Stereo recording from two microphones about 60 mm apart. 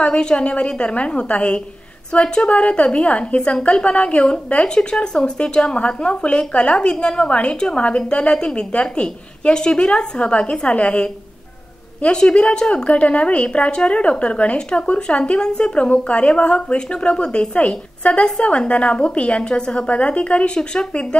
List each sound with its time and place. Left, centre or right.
0.0 s a woman's voice: centre